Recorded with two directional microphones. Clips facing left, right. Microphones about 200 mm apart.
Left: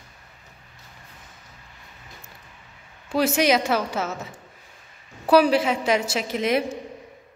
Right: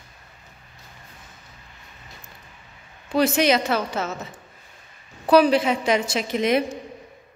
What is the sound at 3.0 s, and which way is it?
A woman's voice, 10° left (ahead or behind).